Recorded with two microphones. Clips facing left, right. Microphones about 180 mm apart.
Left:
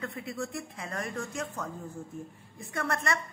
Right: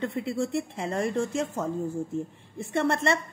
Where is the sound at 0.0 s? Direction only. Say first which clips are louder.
Right 8 dB; 30° right (ahead or behind).